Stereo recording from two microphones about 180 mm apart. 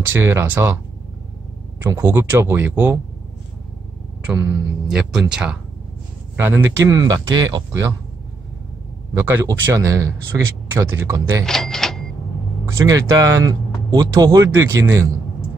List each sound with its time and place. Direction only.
0.0 s speech: 10° right (ahead or behind)
1.8 s speech: 15° right (ahead or behind)
4.3 s speech: 5° right (ahead or behind)
9.1 s speech: 10° right (ahead or behind)
11.4 s a sound: centre (ahead or behind)
12.8 s speech: 20° right (ahead or behind)